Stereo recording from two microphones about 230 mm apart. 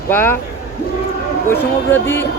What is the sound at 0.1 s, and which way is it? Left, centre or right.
Speech, centre.